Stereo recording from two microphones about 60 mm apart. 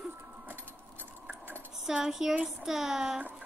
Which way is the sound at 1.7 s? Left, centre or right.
Centre.